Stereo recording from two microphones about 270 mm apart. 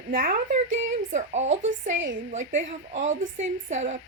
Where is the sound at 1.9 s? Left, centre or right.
Right.